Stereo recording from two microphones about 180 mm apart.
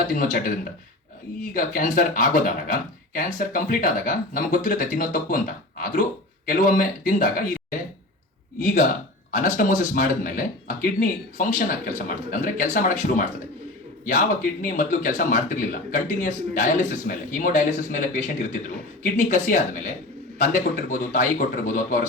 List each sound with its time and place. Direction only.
0.1 s speech: 50° left (ahead or behind)